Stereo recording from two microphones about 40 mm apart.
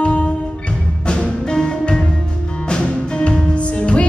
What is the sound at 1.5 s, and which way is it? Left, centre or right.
Music, left.